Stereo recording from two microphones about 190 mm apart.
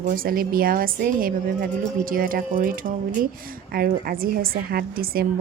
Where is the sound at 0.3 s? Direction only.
50° right (ahead or behind).